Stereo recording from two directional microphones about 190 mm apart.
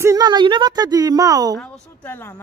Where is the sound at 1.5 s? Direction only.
5° left (ahead or behind).